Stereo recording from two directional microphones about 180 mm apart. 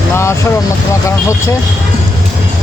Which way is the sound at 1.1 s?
15° left (ahead or behind).